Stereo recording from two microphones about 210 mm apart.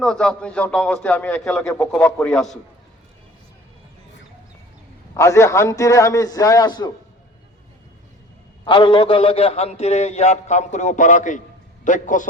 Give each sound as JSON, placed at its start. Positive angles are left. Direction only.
{"t": 0.0, "sound": "a man's voice", "side_deg": 5}
{"t": 5.1, "sound": "a man's voice", "side_deg": 15}
{"t": 8.6, "sound": "a man's voice", "side_deg": 20}